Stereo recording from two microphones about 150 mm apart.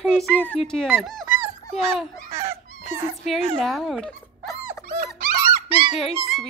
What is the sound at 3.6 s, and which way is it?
Speech, centre (ahead or behind).